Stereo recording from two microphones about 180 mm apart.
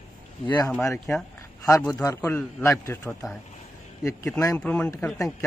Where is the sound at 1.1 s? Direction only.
5° left (ahead or behind).